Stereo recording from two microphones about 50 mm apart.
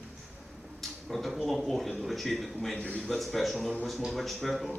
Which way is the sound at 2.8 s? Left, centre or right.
Left.